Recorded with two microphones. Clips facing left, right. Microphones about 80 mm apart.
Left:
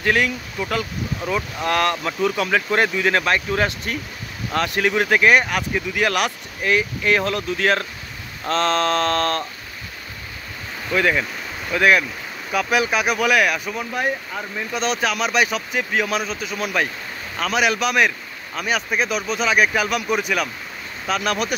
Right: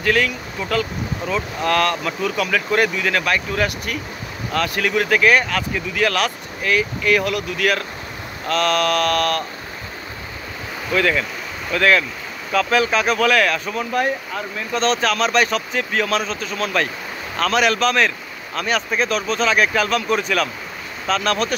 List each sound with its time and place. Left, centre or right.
0.0 s speech: left
10.9 s speech: centre